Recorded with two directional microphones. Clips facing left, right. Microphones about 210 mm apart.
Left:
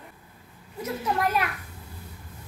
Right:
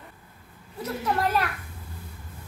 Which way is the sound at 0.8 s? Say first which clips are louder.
Even; 10° left (ahead or behind).